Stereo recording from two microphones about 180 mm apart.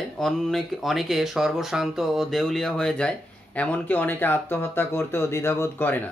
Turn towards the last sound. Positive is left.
turn(degrees=15)  # may be behind; listen again after turning